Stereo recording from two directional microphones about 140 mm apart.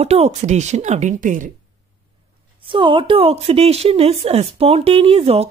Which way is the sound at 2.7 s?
35° right (ahead or behind).